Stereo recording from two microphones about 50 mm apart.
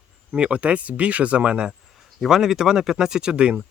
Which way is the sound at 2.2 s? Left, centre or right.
Centre.